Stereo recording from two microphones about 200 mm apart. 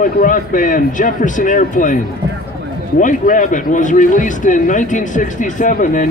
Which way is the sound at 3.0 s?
40° left (ahead or behind).